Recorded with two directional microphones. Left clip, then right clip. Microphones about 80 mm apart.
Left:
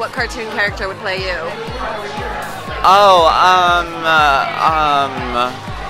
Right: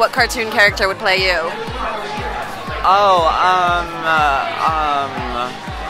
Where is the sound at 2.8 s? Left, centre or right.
Left.